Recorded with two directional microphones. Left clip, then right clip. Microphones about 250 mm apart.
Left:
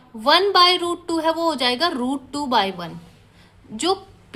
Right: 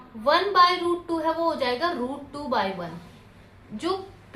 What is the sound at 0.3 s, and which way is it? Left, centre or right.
A woman's voice, left.